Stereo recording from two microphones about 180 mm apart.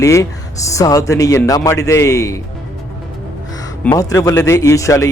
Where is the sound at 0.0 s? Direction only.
15° left (ahead or behind).